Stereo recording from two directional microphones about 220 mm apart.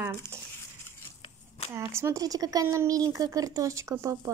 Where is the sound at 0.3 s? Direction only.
10° right (ahead or behind).